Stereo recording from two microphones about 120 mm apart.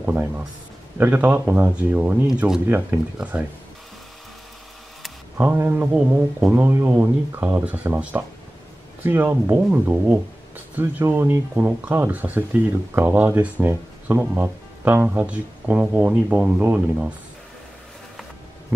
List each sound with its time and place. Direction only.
0.0 s speech: 15° right (ahead or behind)
5.4 s speech: 15° right (ahead or behind)